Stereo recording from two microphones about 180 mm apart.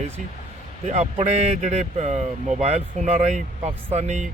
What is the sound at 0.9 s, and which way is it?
Speech, 40° right (ahead or behind).